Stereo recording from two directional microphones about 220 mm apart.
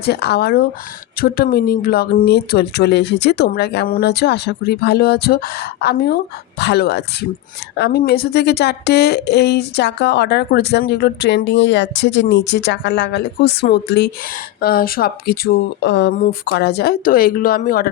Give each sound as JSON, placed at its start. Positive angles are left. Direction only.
{"t": 0.0, "sound": "speech", "side_deg": 45}